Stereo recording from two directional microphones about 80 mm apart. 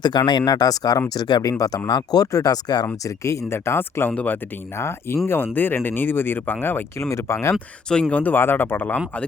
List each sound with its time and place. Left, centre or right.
0.0 s speech: left
3.0 s speech: left
4.1 s speech: centre
4.8 s speech: left
7.1 s speech: left
8.1 s speech: left